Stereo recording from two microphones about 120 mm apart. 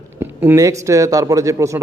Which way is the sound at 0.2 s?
20° right (ahead or behind).